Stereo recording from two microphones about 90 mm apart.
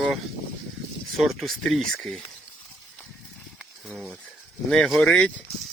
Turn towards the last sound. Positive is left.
turn(degrees=10)  # may be behind; listen again after turning